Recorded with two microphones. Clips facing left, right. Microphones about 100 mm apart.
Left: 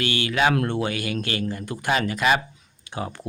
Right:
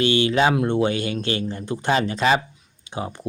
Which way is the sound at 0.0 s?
25° right (ahead or behind).